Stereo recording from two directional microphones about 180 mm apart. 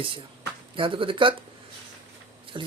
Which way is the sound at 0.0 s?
30° right (ahead or behind).